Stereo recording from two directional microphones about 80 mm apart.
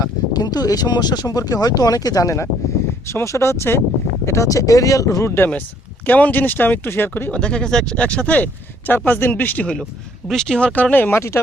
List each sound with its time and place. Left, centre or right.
0.0 s speech: left
6.1 s speech: left
7.3 s speech: centre
10.2 s speech: centre
10.7 s speech: centre